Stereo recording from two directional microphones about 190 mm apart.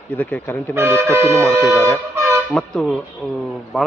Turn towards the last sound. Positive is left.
turn(degrees=0)  # may be behind; listen again after turning